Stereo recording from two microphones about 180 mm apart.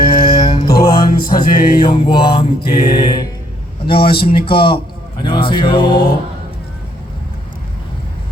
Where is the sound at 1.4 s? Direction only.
25° left (ahead or behind).